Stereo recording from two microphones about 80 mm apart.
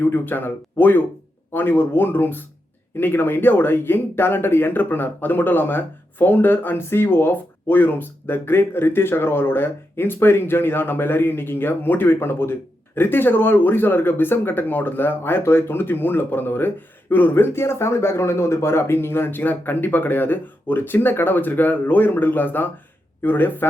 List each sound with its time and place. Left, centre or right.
0.0 s speech: left